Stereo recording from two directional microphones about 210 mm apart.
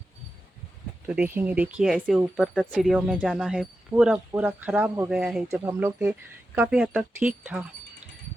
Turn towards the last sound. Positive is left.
turn(degrees=-10)  # may be behind; listen again after turning